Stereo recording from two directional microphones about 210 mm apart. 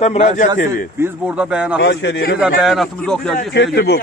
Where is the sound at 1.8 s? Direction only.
60° left (ahead or behind).